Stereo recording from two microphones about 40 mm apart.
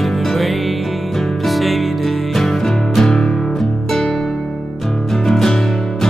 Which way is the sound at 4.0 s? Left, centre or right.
Centre.